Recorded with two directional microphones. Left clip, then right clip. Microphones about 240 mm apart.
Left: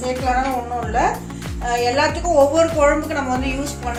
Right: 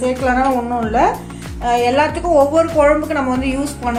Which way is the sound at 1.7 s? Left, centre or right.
Right.